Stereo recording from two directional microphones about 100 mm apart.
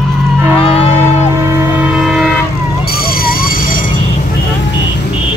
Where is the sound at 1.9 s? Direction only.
5° right (ahead or behind).